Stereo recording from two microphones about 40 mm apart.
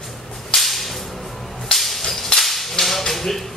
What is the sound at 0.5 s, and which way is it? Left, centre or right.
Whip, centre.